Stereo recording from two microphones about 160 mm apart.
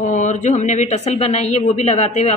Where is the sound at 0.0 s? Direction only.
50° left (ahead or behind).